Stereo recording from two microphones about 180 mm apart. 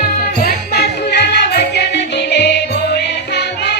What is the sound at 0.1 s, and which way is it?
Music, 55° left (ahead or behind).